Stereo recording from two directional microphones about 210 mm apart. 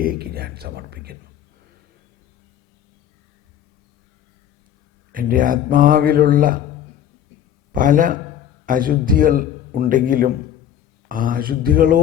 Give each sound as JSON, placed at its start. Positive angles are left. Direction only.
{"t": 0.0, "sound": "speech", "side_deg": -45}
{"t": 5.1, "sound": "a man's voice", "side_deg": -40}
{"t": 7.7, "sound": "a man's voice", "side_deg": -40}